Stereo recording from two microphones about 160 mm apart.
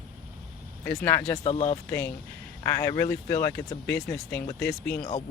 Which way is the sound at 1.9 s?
10° left (ahead or behind).